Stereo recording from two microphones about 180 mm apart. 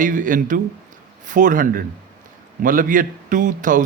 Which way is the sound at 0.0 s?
45° right (ahead or behind).